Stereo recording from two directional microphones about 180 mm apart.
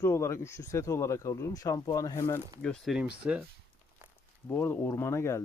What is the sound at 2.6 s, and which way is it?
Speech, centre (ahead or behind).